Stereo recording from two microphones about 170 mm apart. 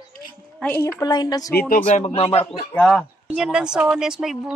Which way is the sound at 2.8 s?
Centre (ahead or behind).